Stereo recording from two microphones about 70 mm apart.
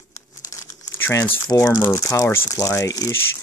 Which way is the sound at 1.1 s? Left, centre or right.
Left.